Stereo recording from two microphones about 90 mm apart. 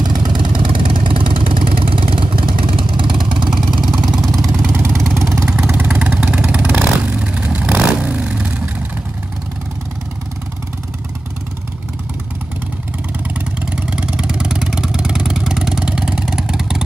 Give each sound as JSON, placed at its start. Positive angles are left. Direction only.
{"t": 0.0, "sound": "vehicle", "side_deg": -60}
{"t": 3.4, "sound": "vehicle", "side_deg": -5}
{"t": 4.7, "sound": "vehicle", "side_deg": -30}
{"t": 5.5, "sound": "vehicle", "side_deg": -10}
{"t": 13.6, "sound": "vehicle", "side_deg": -10}